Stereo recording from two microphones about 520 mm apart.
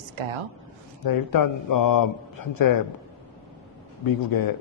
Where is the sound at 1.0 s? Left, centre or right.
Left.